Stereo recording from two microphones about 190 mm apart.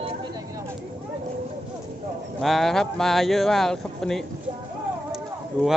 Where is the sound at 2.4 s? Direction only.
Centre (ahead or behind).